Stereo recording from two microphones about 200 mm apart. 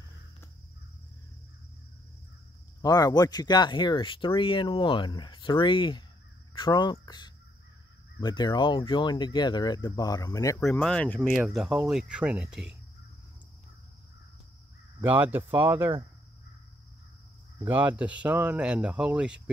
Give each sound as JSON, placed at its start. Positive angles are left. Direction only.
{"t": 2.8, "sound": "speech", "side_deg": 20}
{"t": 10.6, "sound": "speech", "side_deg": 5}
{"t": 15.0, "sound": "speech", "side_deg": -10}
{"t": 17.6, "sound": "speech", "side_deg": -10}